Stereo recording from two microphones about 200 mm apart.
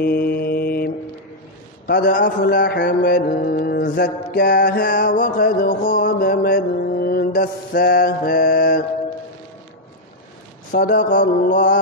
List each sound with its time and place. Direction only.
0.0 s mantra: 50° left (ahead or behind)
2.0 s mantra: 40° left (ahead or behind)
2.4 s a sound: 55° left (ahead or behind)
3.0 s mantra: 45° left (ahead or behind)
10.7 s mantra: 40° left (ahead or behind)